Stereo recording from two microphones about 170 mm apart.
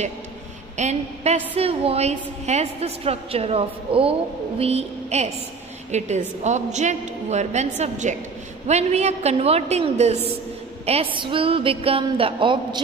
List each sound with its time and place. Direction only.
0.7 s a woman's voice: 40° right (ahead or behind)